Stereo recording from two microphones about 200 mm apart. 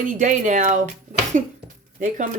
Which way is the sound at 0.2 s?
40° right (ahead or behind).